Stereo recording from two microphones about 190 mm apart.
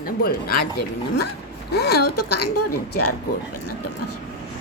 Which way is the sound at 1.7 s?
60° left (ahead or behind).